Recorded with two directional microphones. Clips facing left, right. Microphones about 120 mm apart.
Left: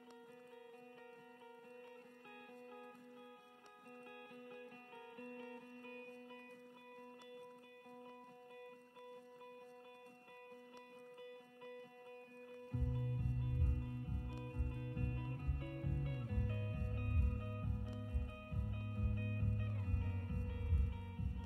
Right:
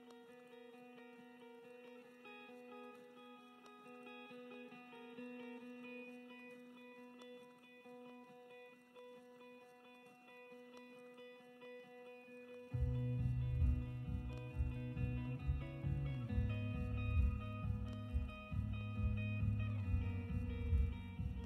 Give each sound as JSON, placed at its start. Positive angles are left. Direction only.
{"t": 4.4, "sound": "music", "side_deg": -25}
{"t": 5.1, "sound": "music", "side_deg": 30}
{"t": 12.7, "sound": "music", "side_deg": 25}
{"t": 17.0, "sound": "music", "side_deg": -25}